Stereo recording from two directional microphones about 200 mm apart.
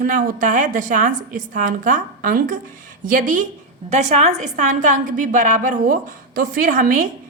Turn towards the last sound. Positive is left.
turn(degrees=-40)  # may be behind; listen again after turning